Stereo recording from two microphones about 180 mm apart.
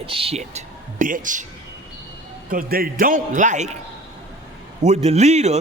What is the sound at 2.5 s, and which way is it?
A man's voice, 55° right (ahead or behind).